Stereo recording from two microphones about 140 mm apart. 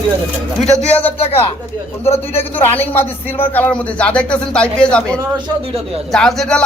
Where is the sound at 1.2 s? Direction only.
45° left (ahead or behind).